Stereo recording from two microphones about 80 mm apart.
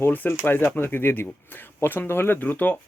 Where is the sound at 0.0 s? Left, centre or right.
Left.